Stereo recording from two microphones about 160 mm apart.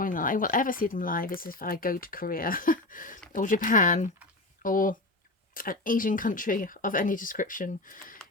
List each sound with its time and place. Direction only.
0.0 s speech: 60° left (ahead or behind)